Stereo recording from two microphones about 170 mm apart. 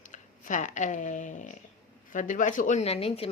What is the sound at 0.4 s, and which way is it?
Speech, 45° left (ahead or behind).